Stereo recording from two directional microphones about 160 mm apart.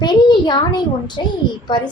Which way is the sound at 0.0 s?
25° left (ahead or behind).